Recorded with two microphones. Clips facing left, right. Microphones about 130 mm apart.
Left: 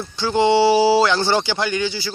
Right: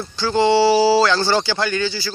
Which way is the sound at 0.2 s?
20° left (ahead or behind).